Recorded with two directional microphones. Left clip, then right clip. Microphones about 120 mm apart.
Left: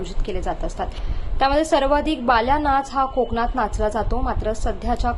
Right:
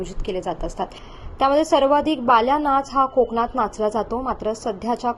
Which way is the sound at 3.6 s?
25° right (ahead or behind).